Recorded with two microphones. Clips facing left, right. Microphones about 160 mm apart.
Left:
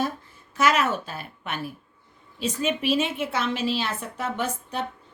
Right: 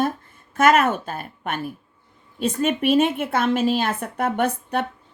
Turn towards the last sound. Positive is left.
turn(degrees=-60)  # may be behind; listen again after turning